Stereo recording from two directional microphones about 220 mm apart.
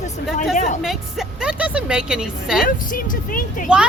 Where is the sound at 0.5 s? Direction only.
35° left (ahead or behind).